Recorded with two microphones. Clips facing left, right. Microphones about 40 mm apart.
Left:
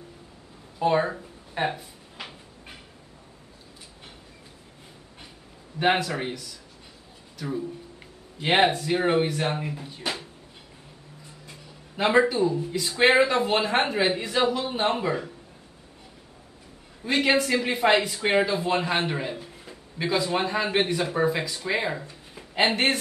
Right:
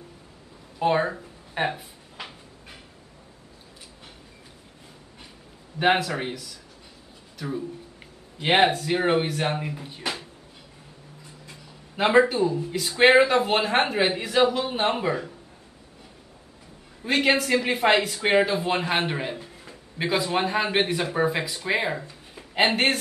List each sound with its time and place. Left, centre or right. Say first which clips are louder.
0.7 s speech: even; centre
2.1 s a sound: right 1 dB; centre
5.8 s a man's voice: right 1 dB; centre
12.0 s speech: right 1 dB; centre
17.0 s speech: right 1 dB; centre
22.0 s a sound: even; centre